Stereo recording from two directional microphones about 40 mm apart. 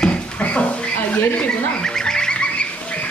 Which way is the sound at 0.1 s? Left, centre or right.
Left.